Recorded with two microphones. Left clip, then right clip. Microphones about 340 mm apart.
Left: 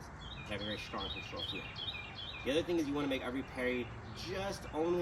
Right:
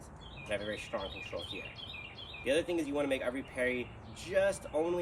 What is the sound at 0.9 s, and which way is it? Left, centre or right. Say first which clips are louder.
Speech: right 4 dB; centre.